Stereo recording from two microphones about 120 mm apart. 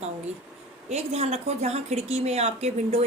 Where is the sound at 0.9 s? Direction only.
65° right (ahead or behind).